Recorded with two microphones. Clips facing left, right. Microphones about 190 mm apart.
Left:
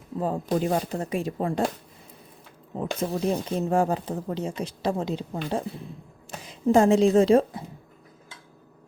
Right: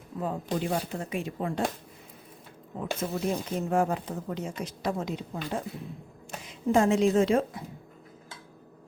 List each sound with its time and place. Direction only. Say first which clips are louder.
0.2 s speech: left 5 dB; 40° left (ahead or behind)
3.0 s speech: left 4 dB; 30° left (ahead or behind)